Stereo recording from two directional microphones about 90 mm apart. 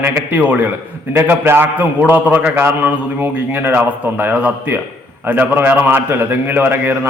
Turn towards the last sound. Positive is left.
turn(degrees=-20)  # may be behind; listen again after turning